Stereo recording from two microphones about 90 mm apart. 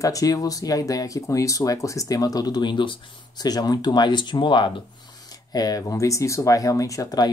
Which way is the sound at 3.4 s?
45° left (ahead or behind).